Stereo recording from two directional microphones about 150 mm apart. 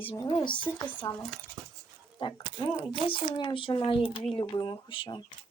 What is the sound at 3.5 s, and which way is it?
Speech, 35° left (ahead or behind).